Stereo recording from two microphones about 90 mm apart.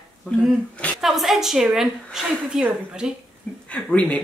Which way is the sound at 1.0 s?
Centre (ahead or behind).